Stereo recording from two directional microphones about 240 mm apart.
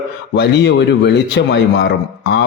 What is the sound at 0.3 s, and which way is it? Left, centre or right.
A man's voice, left.